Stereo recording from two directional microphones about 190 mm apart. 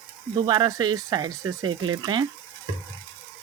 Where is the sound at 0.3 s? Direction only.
20° right (ahead or behind).